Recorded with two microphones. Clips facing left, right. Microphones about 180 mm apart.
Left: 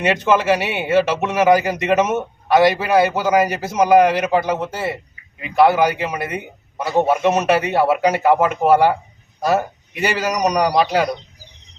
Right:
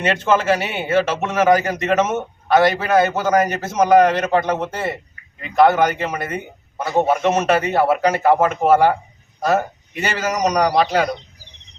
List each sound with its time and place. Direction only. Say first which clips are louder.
0.0 s a man's voice: left 1 dB; 15° left (ahead or behind)